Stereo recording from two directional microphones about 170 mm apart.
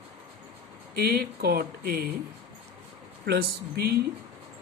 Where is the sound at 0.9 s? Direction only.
60° right (ahead or behind).